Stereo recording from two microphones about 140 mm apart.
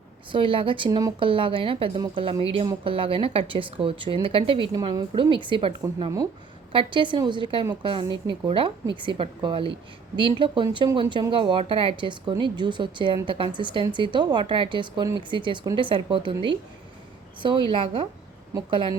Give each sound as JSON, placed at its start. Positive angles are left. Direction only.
{"t": 0.3, "sound": "a woman's voice", "side_deg": -40}
{"t": 1.3, "sound": "a woman's voice", "side_deg": -40}
{"t": 6.7, "sound": "a woman's voice", "side_deg": -35}